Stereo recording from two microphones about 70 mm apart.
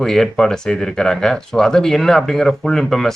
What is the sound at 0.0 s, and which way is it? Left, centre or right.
Speech, centre.